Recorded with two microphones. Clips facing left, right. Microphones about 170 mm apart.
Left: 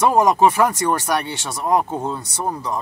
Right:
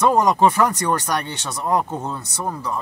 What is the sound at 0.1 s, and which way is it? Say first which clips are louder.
Speech: left 1 dB; 10° left (ahead or behind).